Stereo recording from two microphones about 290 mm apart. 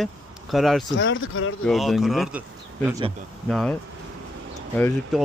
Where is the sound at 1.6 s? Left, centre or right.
Centre.